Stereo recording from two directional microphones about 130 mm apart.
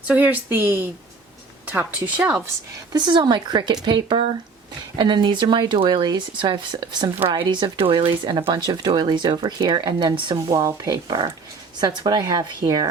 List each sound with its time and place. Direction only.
0.1 s speech: 15° right (ahead or behind)
2.9 s a woman's voice: 35° right (ahead or behind)